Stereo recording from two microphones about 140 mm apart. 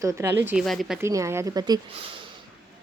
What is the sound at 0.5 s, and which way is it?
Speech, centre (ahead or behind).